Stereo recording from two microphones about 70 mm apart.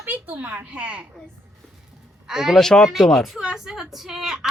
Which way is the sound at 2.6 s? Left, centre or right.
Centre.